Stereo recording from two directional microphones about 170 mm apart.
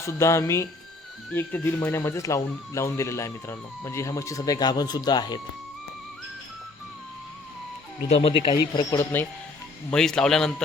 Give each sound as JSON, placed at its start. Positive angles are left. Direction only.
{"t": 0.0, "sound": "speech", "side_deg": 15}
{"t": 8.1, "sound": "speech", "side_deg": 35}
{"t": 9.9, "sound": "speech", "side_deg": 5}